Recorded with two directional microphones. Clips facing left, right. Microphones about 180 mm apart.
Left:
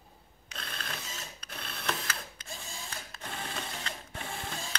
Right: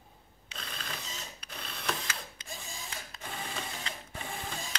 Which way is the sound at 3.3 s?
10° right (ahead or behind).